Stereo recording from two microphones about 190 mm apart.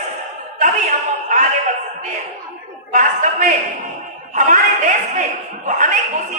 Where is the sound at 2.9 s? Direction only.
40° right (ahead or behind).